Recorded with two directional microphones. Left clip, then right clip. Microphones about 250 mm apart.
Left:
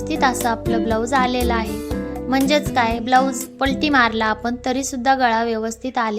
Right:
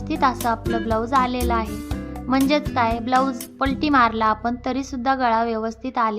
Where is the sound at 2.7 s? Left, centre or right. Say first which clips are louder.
Left 4 dB; left.